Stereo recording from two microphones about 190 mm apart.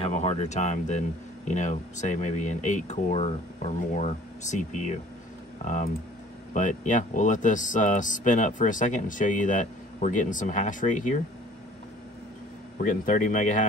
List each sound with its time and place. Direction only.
0.0 s speech: 35° left (ahead or behind)
6.5 s speech: 40° left (ahead or behind)
12.7 s a man's voice: 45° left (ahead or behind)